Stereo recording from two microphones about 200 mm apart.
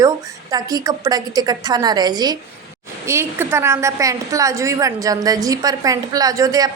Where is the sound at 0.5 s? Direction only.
20° right (ahead or behind).